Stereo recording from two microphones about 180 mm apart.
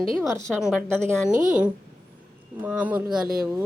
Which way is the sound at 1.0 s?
45° right (ahead or behind).